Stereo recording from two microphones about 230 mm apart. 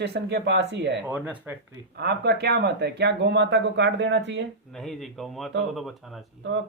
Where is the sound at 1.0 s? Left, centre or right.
Centre.